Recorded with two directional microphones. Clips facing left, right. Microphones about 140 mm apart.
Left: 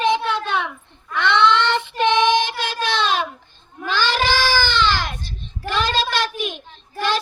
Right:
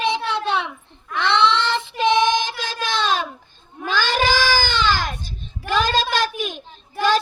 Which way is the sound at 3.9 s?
45° right (ahead or behind).